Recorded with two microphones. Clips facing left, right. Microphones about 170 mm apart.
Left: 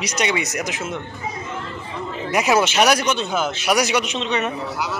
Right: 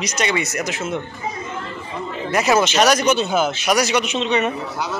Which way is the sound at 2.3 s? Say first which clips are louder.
Right 1 dB; 10° left (ahead or behind).